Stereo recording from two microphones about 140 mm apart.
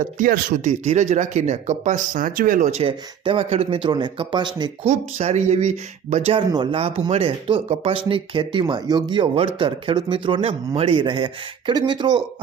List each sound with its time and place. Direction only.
0.0 s speech: 70° right (ahead or behind)
2.8 s speech: 40° right (ahead or behind)
3.8 s speech: 35° right (ahead or behind)
4.9 s speech: 55° right (ahead or behind)
6.5 s speech: 35° right (ahead or behind)